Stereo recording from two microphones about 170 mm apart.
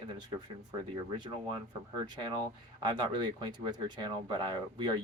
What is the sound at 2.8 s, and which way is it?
Speech, 25° right (ahead or behind).